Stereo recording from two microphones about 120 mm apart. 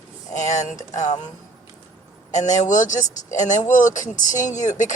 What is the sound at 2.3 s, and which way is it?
Speech, 90° left.